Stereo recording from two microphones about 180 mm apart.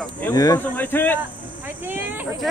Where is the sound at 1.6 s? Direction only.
10° right (ahead or behind).